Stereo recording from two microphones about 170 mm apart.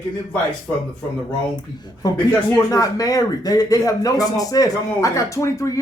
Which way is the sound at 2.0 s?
25° left (ahead or behind).